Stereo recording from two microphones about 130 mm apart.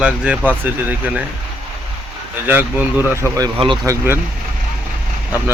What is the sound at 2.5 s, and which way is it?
Speech, 15° right (ahead or behind).